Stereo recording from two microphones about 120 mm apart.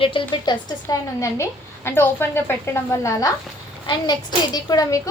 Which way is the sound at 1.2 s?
20° left (ahead or behind).